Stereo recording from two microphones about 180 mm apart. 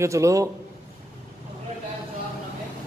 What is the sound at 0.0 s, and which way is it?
Speech, 15° right (ahead or behind).